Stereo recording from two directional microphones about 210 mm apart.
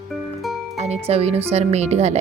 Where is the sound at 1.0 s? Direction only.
30° right (ahead or behind).